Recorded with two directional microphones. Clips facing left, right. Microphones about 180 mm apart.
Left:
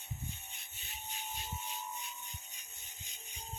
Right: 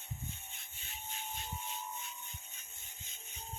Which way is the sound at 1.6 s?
15° left (ahead or behind).